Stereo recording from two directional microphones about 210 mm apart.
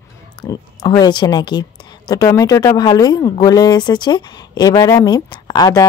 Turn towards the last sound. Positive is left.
turn(degrees=20)  # may be behind; listen again after turning